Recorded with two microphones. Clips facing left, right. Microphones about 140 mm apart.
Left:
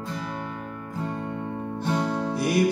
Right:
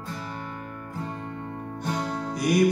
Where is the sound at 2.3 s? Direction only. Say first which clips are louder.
Right 1 dB; 30° left (ahead or behind).